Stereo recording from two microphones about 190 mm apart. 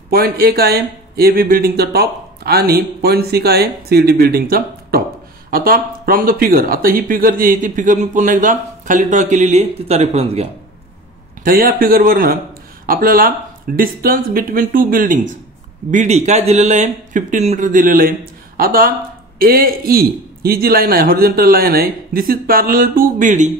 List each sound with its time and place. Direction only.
0.1 s speech: 55° right (ahead or behind); by 10.5 s 30° right (ahead or behind)
11.4 s speech: 50° right (ahead or behind)